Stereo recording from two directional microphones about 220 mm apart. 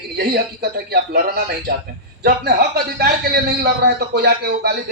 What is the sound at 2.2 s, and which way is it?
A man's voice, 45° right (ahead or behind).